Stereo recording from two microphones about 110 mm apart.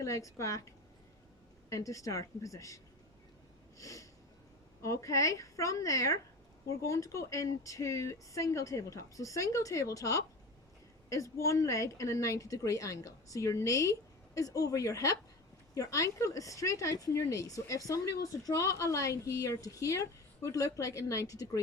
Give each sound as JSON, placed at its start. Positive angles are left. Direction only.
{"t": 0.0, "sound": "speech", "side_deg": 30}
{"t": 1.7, "sound": "speech", "side_deg": 30}
{"t": 3.8, "sound": "snort", "side_deg": 30}
{"t": 4.8, "sound": "speech", "side_deg": 30}